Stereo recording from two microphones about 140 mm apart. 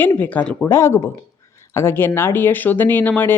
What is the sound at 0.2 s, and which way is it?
Speech, 10° left (ahead or behind).